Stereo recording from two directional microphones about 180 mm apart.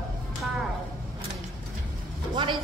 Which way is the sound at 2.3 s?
30° right (ahead or behind).